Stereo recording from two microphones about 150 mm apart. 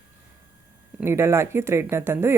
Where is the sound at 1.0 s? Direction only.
15° right (ahead or behind).